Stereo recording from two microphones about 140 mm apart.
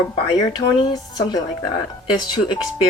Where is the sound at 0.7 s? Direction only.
30° left (ahead or behind).